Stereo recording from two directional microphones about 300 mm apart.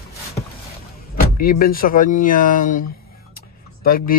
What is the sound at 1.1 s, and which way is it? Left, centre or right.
Speech, left.